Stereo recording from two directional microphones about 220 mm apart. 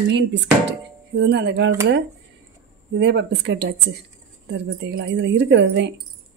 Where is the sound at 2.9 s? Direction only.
50° right (ahead or behind).